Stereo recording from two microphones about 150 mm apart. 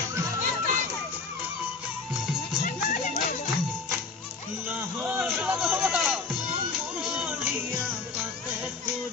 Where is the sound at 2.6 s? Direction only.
60° left (ahead or behind).